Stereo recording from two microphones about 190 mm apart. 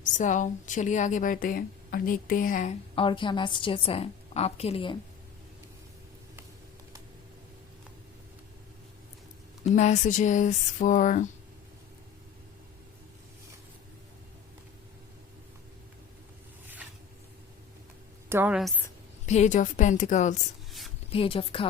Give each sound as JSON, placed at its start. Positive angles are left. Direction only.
{"t": 0.0, "sound": "a woman's voice", "side_deg": 40}
{"t": 2.9, "sound": "a woman's voice", "side_deg": 25}
{"t": 9.6, "sound": "a woman's voice", "side_deg": 40}
{"t": 18.3, "sound": "a woman's voice", "side_deg": -10}
{"t": 19.2, "sound": "a woman's voice", "side_deg": 40}
{"t": 20.7, "sound": "a sound", "side_deg": 0}
{"t": 21.1, "sound": "a woman's voice", "side_deg": 30}